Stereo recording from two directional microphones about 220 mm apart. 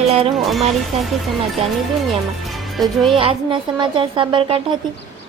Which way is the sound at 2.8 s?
Centre (ahead or behind).